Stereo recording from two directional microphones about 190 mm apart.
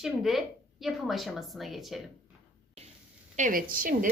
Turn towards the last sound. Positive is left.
turn(degrees=-45)  # may be behind; listen again after turning